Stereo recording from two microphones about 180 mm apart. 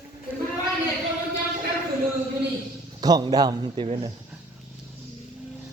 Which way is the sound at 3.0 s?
20° right (ahead or behind).